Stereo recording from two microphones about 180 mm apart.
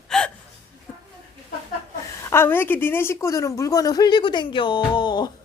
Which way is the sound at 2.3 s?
10° left (ahead or behind).